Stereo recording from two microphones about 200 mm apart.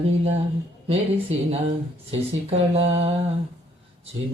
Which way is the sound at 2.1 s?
30° right (ahead or behind).